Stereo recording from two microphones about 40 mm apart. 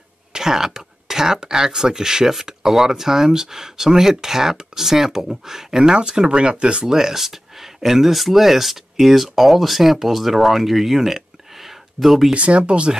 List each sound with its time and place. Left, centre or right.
0.3 s speech: centre
6.9 s speech: centre
12.4 s speech: right